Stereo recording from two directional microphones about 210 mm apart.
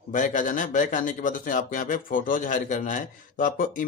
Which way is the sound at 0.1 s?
40° left (ahead or behind).